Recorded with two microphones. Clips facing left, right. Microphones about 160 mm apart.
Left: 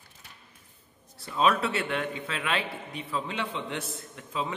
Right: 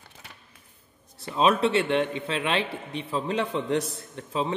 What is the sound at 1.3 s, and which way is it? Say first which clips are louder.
Speech: right 4 dB; 25° right (ahead or behind).